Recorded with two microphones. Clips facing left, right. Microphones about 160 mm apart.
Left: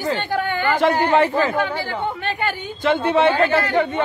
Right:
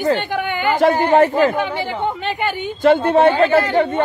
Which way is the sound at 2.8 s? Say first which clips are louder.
Right 5 dB; 45° right (ahead or behind).